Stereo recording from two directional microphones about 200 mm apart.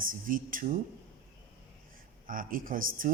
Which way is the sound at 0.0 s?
45° right (ahead or behind).